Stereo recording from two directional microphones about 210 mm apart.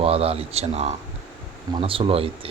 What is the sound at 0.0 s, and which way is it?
Speech, 30° right (ahead or behind).